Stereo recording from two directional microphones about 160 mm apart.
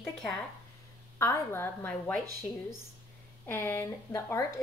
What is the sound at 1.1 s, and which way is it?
A woman's voice, 20° left (ahead or behind).